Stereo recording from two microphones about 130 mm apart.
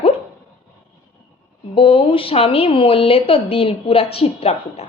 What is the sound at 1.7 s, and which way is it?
A woman's voice, 45° left (ahead or behind).